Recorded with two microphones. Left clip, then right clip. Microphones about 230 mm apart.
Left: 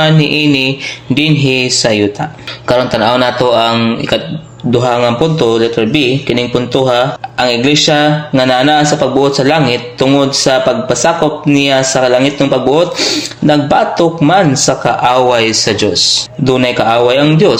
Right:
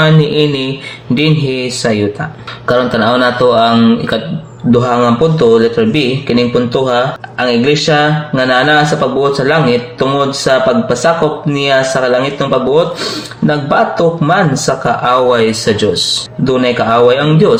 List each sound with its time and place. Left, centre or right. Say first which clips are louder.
0.0 s speech: even; left
2.6 s music: left 1 dB; left